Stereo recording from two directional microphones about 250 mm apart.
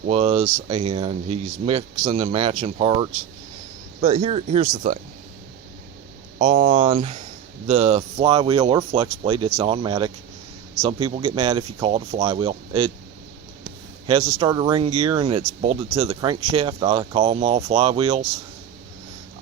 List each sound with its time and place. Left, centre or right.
0.1 s speech: right
6.4 s speech: right